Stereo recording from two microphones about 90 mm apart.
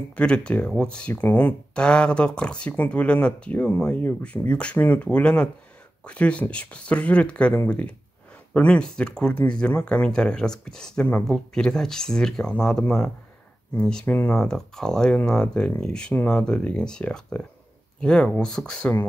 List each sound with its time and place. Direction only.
0.1 s speech: 10° left (ahead or behind)
14.0 s speech: 20° left (ahead or behind)
14.3 s speech: 5° left (ahead or behind)